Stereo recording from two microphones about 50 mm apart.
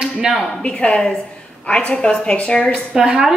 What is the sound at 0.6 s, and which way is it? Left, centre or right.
A woman's voice, left.